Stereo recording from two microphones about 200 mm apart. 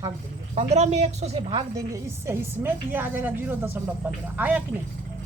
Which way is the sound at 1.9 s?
10° right (ahead or behind).